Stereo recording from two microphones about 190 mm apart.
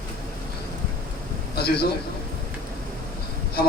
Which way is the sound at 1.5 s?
55° left (ahead or behind).